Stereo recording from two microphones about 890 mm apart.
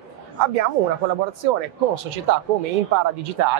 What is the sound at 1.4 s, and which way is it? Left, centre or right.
Speech, right.